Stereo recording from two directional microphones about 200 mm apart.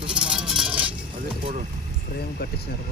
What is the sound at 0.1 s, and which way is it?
Music, 5° right (ahead or behind).